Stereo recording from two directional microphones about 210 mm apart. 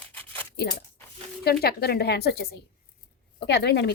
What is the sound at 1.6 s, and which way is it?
A woman's voice, 50° left (ahead or behind).